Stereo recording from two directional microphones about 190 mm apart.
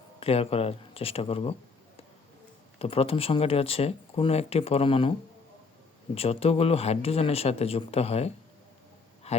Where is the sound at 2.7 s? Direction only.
30° left (ahead or behind).